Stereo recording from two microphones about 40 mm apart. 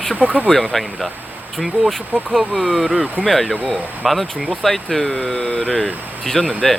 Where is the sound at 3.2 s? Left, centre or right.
Centre.